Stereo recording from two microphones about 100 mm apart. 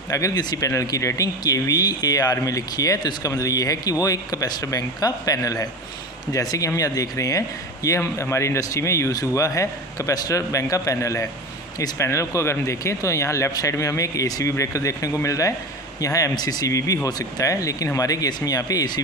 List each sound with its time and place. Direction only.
0.1 s speech: 35° left (ahead or behind)